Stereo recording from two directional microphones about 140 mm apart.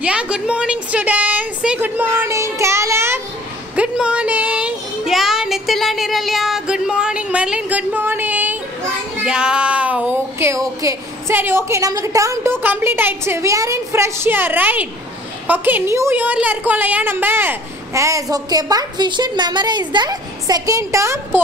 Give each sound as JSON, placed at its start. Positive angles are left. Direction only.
{"t": 0.0, "sound": "speech", "side_deg": -10}
{"t": 3.7, "sound": "a woman's voice", "side_deg": -5}